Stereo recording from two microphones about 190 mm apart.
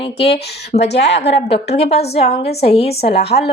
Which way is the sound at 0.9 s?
65° left (ahead or behind).